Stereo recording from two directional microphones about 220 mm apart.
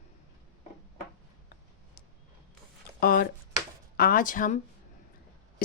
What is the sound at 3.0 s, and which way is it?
Speech, 40° left (ahead or behind).